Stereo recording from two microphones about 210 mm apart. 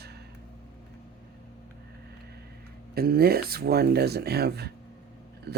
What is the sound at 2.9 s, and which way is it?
Speech, 45° right (ahead or behind).